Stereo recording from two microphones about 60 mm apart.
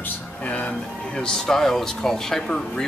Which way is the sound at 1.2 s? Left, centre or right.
Centre.